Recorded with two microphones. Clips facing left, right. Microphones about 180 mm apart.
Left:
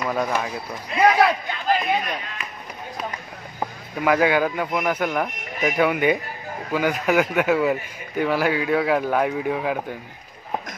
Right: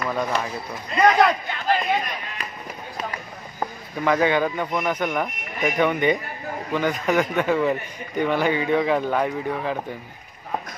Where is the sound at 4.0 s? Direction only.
5° left (ahead or behind).